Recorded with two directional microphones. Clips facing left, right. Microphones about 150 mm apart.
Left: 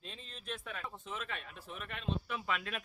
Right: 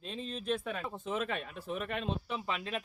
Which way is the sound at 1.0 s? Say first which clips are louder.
Right 10 dB; 55° right (ahead or behind).